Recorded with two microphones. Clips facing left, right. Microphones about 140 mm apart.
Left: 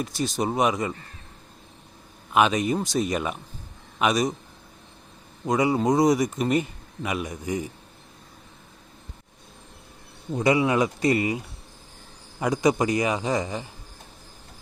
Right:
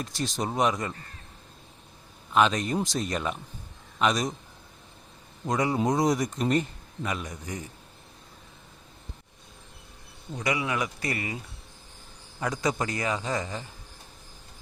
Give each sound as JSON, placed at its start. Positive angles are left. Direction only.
{"t": 0.0, "sound": "speech", "side_deg": 5}
{"t": 2.3, "sound": "a man's voice", "side_deg": 10}
{"t": 5.5, "sound": "speech", "side_deg": 5}
{"t": 10.3, "sound": "a man's voice", "side_deg": 30}